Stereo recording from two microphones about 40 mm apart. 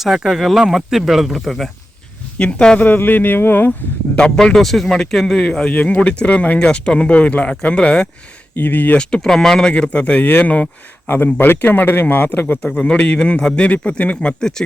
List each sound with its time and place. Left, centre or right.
0.0 s speech: centre
2.4 s a man's voice: left
2.7 s speech: left
4.5 s speech: centre
5.4 s speech: left
5.7 s a man's voice: left
8.5 s speech: left
9.0 s speech: left
9.2 s speech: centre
9.6 s a man's voice: left
11.3 s speech: left
11.6 s speech: left
12.7 s a man's voice: left